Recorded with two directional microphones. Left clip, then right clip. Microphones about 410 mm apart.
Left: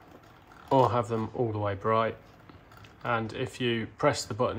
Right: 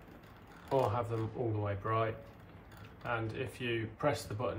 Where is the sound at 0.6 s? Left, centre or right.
Left.